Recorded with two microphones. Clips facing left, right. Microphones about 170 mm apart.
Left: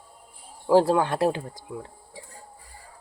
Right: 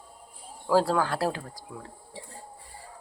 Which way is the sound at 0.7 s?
20° left (ahead or behind).